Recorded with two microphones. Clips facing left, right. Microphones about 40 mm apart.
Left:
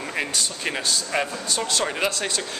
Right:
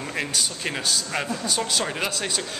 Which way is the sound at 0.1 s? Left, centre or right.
Centre.